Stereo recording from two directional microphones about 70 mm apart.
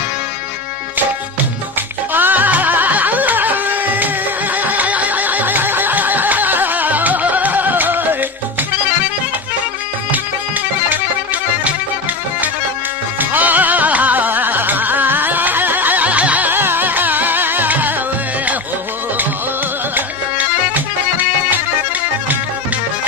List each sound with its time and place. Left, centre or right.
2.1 s music: right
10.8 s music: right
13.1 s music: right
20.0 s music: right